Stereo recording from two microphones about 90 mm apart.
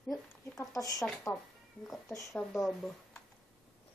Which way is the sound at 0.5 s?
40° left (ahead or behind).